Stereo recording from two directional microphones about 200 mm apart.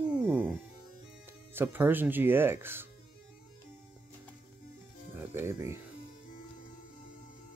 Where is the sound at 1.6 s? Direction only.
10° right (ahead or behind).